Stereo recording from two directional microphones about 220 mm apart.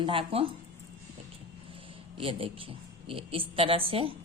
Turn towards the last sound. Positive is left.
turn(degrees=-25)  # may be behind; listen again after turning